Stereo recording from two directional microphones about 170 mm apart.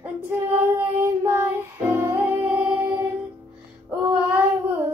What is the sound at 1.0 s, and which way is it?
Music, 15° right (ahead or behind).